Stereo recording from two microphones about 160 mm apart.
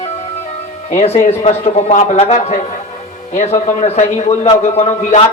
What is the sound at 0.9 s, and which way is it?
A man's voice, 40° left (ahead or behind).